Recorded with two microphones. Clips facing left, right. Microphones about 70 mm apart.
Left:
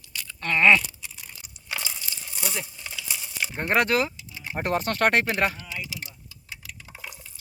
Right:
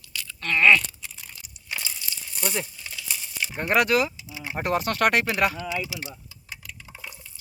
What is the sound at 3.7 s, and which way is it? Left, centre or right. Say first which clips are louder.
Speech: right 1 dB; left.